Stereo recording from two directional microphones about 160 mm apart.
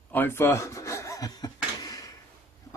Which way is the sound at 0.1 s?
15° left (ahead or behind).